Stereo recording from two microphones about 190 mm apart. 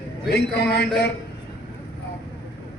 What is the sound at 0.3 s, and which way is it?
Speech, 60° left (ahead or behind).